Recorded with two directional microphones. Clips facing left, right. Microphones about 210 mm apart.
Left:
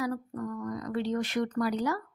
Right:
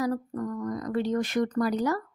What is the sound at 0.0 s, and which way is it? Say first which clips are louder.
A woman's voice: right 4 dB; 40° right (ahead or behind).